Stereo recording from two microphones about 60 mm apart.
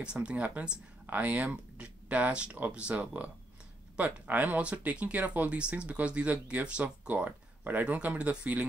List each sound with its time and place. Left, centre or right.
0.0 s speech: centre